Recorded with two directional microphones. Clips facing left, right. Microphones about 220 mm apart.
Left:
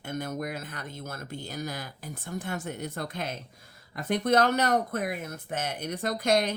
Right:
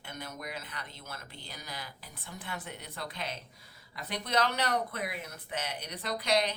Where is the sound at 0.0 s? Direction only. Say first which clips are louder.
Left 10 dB; 45° left (ahead or behind).